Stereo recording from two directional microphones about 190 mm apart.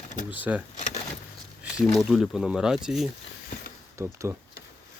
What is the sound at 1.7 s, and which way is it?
Speech, centre (ahead or behind).